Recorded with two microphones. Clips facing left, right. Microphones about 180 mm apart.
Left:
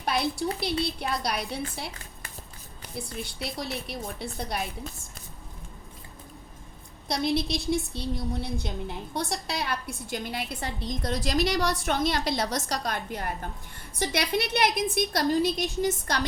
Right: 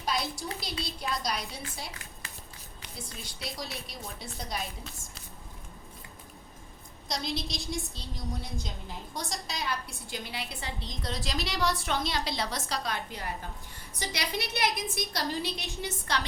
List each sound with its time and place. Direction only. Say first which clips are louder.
0.0 s a woman's voice: left 6 dB; 60° left (ahead or behind)
2.9 s a woman's voice: left 9 dB; 60° left (ahead or behind)
7.1 s a woman's voice: left 8 dB; 60° left (ahead or behind); by 16.2 s 40° left (ahead or behind)